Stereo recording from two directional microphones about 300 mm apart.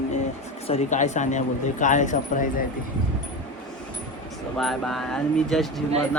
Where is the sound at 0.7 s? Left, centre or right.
Left.